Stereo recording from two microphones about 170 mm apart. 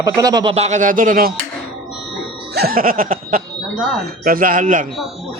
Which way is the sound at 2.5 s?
65° right (ahead or behind).